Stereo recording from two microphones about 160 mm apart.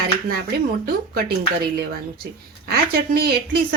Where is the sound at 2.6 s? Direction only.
75° right (ahead or behind).